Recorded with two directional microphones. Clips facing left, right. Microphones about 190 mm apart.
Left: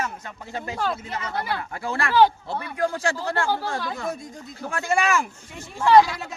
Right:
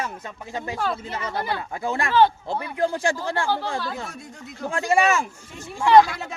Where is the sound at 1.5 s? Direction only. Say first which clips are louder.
Right 2 dB; 20° right (ahead or behind).